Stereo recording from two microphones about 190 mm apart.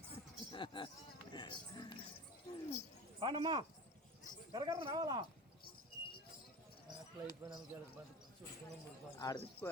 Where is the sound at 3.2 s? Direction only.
25° right (ahead or behind).